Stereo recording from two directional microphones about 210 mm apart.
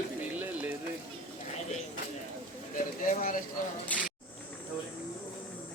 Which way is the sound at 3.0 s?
40° left (ahead or behind).